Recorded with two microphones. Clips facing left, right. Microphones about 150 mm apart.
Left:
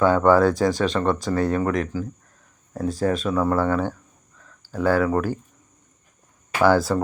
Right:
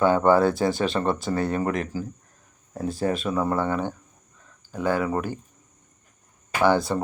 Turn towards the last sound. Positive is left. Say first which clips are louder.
# left 3 dB
turn(degrees=-20)  # may be behind; listen again after turning